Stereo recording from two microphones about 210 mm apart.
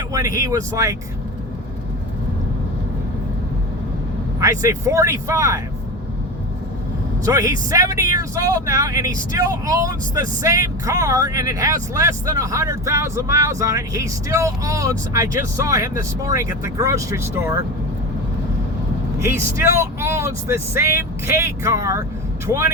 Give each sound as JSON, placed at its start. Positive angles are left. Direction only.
{"t": 0.3, "sound": "speech", "side_deg": -15}
{"t": 4.4, "sound": "speech", "side_deg": -15}
{"t": 7.3, "sound": "speech", "side_deg": -15}
{"t": 19.2, "sound": "speech", "side_deg": -15}